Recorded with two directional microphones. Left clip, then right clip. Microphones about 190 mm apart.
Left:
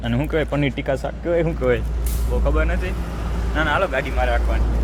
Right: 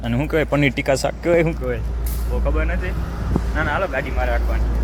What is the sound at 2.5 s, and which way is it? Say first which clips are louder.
Speech: left 1 dB; 20° left (ahead or behind).